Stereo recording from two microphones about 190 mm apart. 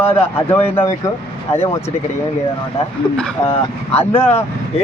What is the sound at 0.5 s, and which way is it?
Speech, 10° left (ahead or behind).